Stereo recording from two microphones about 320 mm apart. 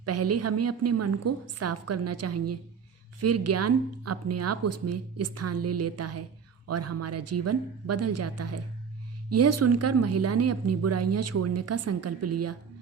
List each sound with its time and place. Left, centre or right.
0.0 s a woman's voice: right